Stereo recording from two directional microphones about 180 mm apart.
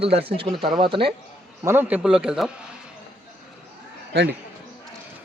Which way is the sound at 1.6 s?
10° right (ahead or behind).